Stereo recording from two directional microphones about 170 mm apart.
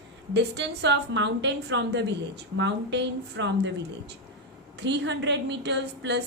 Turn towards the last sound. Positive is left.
turn(degrees=-90)